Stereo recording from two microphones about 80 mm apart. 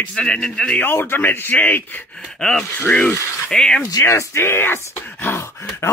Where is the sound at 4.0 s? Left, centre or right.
Left.